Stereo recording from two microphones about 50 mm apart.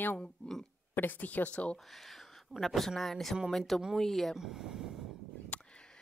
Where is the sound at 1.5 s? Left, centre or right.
Left.